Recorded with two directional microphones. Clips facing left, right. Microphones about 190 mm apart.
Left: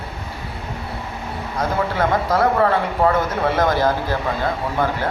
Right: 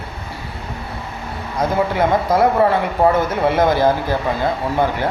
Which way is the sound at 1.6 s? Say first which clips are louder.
Right 3 dB; 15° right (ahead or behind).